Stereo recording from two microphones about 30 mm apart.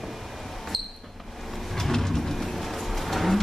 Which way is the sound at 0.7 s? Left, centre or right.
Centre.